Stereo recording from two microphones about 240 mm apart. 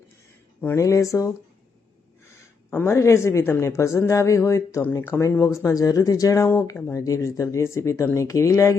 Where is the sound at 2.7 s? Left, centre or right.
Centre.